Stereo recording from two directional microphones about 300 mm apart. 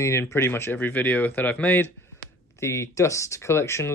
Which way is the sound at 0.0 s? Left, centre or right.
Centre.